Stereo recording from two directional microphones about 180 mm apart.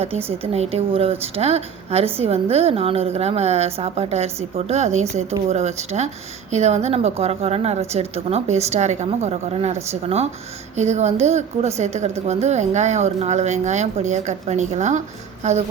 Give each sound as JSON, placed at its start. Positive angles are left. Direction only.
{"t": 0.3, "sound": "speech", "side_deg": -35}